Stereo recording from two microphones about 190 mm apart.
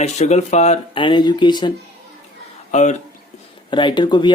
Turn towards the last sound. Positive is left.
turn(degrees=25)  # may be behind; listen again after turning